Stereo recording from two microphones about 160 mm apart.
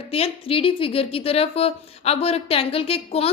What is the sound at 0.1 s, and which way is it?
A woman's voice, 35° left (ahead or behind).